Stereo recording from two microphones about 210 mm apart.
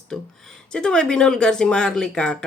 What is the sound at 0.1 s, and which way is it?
Speech, 5° left (ahead or behind).